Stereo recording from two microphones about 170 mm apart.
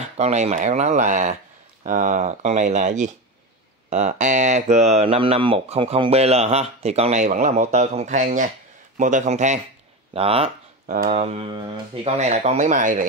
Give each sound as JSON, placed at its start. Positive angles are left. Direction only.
{"t": 0.2, "sound": "speech", "side_deg": -40}
{"t": 10.9, "sound": "speech", "side_deg": -50}
{"t": 11.2, "sound": "speech", "side_deg": -35}
{"t": 12.2, "sound": "speech", "side_deg": -40}